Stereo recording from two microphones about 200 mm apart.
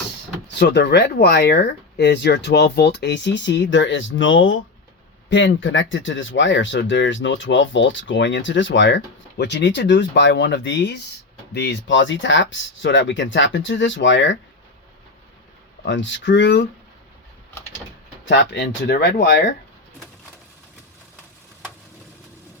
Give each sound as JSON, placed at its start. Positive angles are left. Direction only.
{"t": 0.6, "sound": "speech", "side_deg": 60}
{"t": 15.8, "sound": "speech", "side_deg": 65}
{"t": 18.3, "sound": "speech", "side_deg": 65}